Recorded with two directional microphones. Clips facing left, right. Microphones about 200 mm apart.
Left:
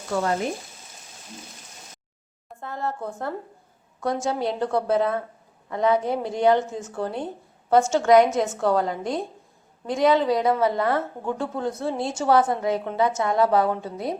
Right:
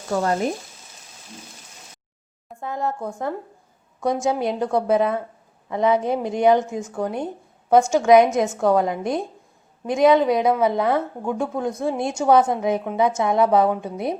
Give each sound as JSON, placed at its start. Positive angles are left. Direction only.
{"t": 2.6, "sound": "a woman's voice", "side_deg": -15}